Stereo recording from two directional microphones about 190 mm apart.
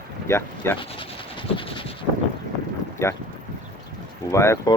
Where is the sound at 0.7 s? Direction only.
25° left (ahead or behind).